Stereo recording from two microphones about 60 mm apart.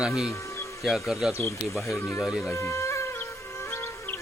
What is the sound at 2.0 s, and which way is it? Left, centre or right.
Speech, left.